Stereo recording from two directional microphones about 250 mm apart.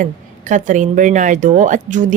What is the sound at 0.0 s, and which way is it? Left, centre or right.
A woman's voice, right.